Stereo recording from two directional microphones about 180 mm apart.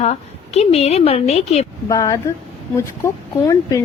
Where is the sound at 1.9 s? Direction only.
20° left (ahead or behind).